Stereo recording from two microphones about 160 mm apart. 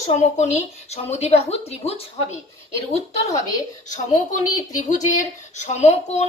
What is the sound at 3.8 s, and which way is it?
A woman's voice, 50° left (ahead or behind).